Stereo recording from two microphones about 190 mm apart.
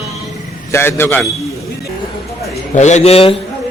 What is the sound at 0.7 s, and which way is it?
Speech, 10° left (ahead or behind).